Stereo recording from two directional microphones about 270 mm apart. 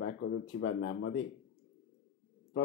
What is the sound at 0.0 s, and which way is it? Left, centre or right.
Speech, left.